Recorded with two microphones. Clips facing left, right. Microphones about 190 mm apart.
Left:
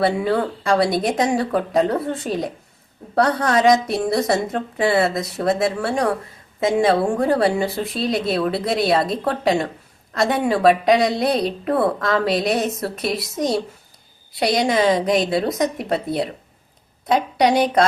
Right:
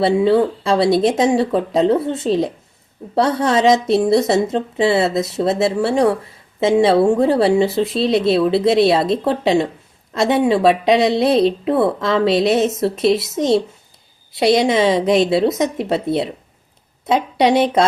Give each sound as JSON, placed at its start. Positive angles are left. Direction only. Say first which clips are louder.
{"t": 0.0, "sound": "a woman's voice", "louder": "right 5 dB", "side_deg": -25}